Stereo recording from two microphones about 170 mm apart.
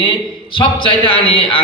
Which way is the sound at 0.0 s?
30° left (ahead or behind).